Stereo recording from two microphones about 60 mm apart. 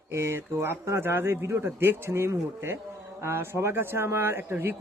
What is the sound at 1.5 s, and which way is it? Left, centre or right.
A man's voice, right.